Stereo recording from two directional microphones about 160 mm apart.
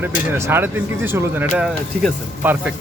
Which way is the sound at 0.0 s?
15° right (ahead or behind).